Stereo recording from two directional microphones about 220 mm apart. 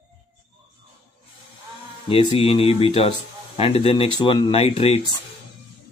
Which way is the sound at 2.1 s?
25° left (ahead or behind).